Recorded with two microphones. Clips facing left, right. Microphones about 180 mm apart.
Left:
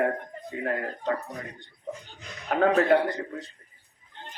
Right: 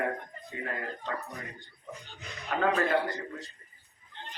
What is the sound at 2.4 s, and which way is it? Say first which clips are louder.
Speech: left 6 dB; 60° left (ahead or behind).